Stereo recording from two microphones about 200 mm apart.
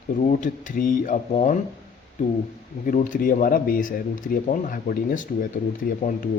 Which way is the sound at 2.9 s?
40° left (ahead or behind).